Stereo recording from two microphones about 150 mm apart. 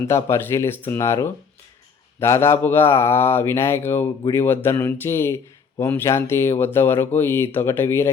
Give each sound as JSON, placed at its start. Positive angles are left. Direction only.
{"t": 0.0, "sound": "speech", "side_deg": 20}